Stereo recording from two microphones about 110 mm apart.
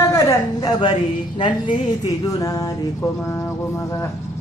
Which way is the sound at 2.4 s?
30° left (ahead or behind).